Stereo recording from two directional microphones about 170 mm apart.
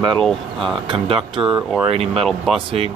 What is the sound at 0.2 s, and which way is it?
Speech, 5° left (ahead or behind).